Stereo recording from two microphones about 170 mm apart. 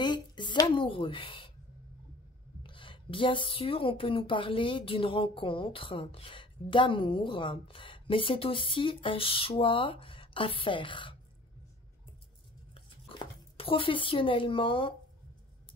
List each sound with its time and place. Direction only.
0.0 s a woman's voice: 25° left (ahead or behind)
2.6 s speech: 30° left (ahead or behind)
12.7 s speech: 30° left (ahead or behind)